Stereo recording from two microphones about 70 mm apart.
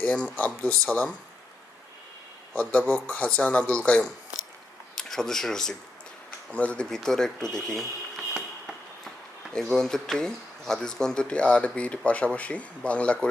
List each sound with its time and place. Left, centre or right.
0.0 s speech: left
2.6 s speech: centre
4.9 s speech: centre
6.5 s speech: centre